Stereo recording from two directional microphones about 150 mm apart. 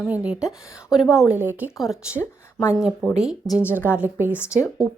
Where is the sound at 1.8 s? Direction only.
Centre (ahead or behind).